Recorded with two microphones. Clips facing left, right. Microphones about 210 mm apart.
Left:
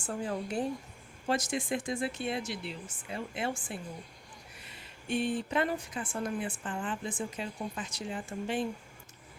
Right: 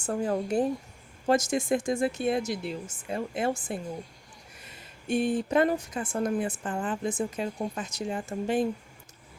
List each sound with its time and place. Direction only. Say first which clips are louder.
0.0 s a woman's voice: right 6 dB; 45° right (ahead or behind)